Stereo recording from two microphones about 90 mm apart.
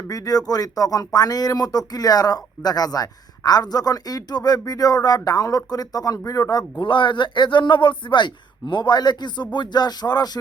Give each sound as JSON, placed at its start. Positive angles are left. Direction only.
{"t": 0.1, "sound": "speech", "side_deg": 40}
{"t": 6.7, "sound": "a man's voice", "side_deg": 65}